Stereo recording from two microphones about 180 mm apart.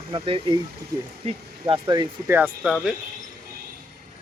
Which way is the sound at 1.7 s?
25° right (ahead or behind).